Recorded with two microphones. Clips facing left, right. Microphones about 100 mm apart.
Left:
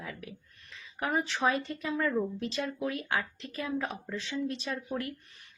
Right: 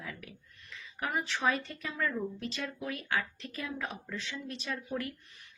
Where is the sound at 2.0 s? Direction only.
40° left (ahead or behind).